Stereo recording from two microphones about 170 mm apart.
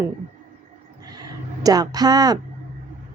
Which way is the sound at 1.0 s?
20° right (ahead or behind).